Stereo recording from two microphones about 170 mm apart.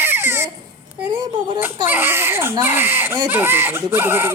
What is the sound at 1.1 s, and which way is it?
Speech, 25° right (ahead or behind).